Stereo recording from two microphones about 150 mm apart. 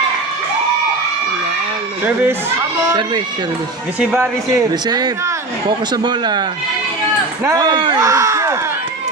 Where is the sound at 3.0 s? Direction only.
30° right (ahead or behind).